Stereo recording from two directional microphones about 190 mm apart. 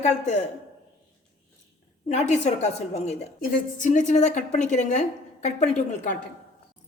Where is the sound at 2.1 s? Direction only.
40° left (ahead or behind).